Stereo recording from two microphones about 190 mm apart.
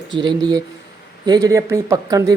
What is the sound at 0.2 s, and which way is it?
Speech, 25° right (ahead or behind).